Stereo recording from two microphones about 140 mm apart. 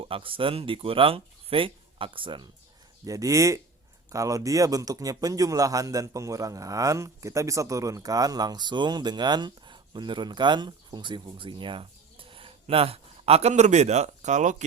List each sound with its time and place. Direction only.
0.0 s speech: 40° right (ahead or behind)
3.0 s a man's voice: 25° right (ahead or behind); by 14.5 s 60° right (ahead or behind)